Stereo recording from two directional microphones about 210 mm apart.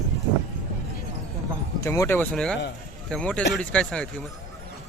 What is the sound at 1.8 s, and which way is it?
Speech, 15° left (ahead or behind).